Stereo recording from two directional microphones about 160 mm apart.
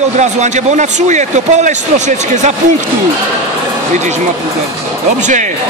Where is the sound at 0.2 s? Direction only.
45° right (ahead or behind).